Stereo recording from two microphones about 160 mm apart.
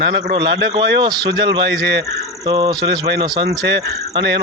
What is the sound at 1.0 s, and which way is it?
Speech, 25° right (ahead or behind).